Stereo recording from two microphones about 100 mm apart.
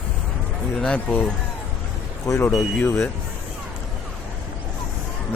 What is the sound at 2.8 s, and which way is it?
Speech, 25° left (ahead or behind).